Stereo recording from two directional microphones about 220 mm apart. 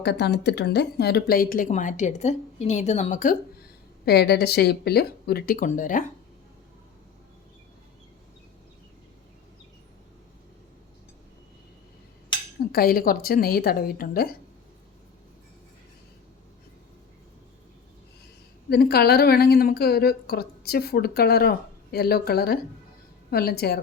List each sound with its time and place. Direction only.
0.0 s speech: 50° left (ahead or behind)
12.7 s speech: 40° left (ahead or behind)
18.7 s speech: 45° left (ahead or behind)